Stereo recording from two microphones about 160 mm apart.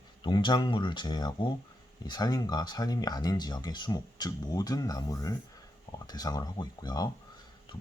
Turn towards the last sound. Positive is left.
turn(degrees=25)  # may be behind; listen again after turning